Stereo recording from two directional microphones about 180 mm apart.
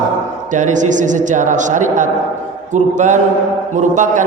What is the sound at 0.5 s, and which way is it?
A man's voice, 45° right (ahead or behind).